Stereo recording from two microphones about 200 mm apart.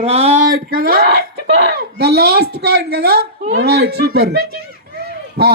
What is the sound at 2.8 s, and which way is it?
Speech, 55° right (ahead or behind).